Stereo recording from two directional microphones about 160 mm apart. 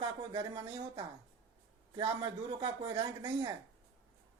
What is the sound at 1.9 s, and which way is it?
Speech, 35° right (ahead or behind).